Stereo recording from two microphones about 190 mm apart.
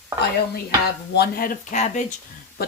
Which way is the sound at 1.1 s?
55° left (ahead or behind).